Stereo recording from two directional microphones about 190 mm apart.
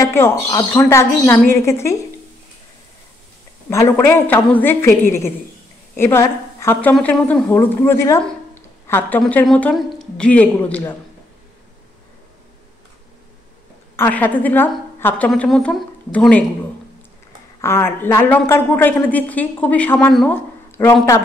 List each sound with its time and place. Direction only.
0.0 s a woman's voice: 15° left (ahead or behind)
3.7 s a woman's voice: 10° left (ahead or behind)
13.9 s a woman's voice: 10° left (ahead or behind)
17.6 s a woman's voice: 15° left (ahead or behind)